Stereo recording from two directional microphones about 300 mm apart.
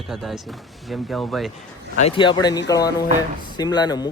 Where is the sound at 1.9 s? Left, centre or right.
Left.